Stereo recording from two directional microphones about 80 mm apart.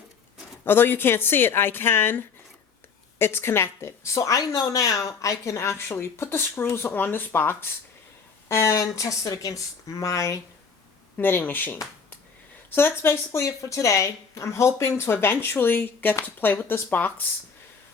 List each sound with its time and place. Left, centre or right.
0.6 s a woman's voice: left
11.2 s a woman's voice: left